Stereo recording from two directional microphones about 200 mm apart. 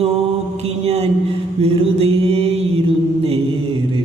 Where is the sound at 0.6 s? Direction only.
30° right (ahead or behind).